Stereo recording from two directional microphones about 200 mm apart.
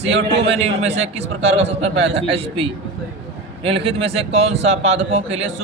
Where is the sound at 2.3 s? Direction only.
30° right (ahead or behind).